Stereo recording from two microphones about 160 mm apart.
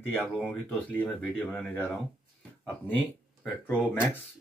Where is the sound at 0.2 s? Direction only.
Centre (ahead or behind).